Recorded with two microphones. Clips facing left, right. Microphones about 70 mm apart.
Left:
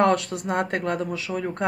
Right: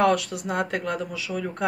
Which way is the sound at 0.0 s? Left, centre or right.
Left.